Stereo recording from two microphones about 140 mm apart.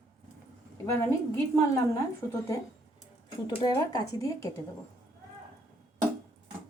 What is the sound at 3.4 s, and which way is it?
A woman's voice, 30° left (ahead or behind).